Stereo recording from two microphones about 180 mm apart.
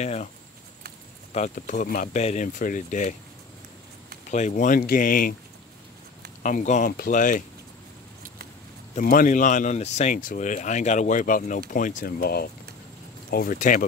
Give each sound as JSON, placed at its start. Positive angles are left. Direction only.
{"t": 0.0, "sound": "speech", "side_deg": 40}
{"t": 1.3, "sound": "speech", "side_deg": 45}
{"t": 4.3, "sound": "speech", "side_deg": 40}
{"t": 6.4, "sound": "speech", "side_deg": 45}
{"t": 8.9, "sound": "speech", "side_deg": 50}